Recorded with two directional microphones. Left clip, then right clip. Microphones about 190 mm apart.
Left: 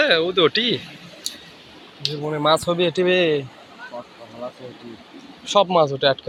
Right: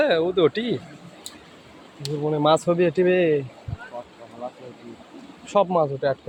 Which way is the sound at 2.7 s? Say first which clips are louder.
Left 1 dB; 15° right (ahead or behind).